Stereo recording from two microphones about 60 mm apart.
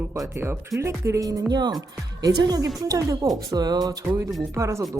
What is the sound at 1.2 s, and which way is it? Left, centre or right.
A woman's voice, right.